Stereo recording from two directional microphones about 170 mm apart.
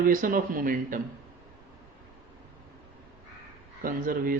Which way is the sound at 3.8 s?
55° right (ahead or behind).